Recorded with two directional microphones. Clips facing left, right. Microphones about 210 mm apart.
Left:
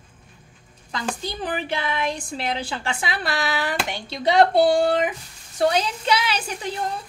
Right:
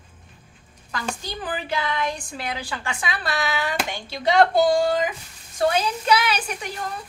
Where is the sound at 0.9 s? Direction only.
25° left (ahead or behind).